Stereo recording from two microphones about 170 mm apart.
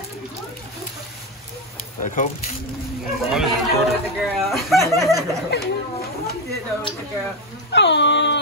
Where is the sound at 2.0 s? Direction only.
50° left (ahead or behind).